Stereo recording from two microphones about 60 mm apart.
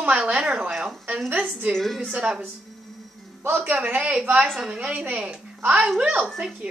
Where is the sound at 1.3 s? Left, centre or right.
Right.